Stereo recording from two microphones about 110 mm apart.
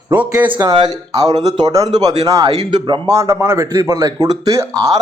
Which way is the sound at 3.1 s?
30° right (ahead or behind).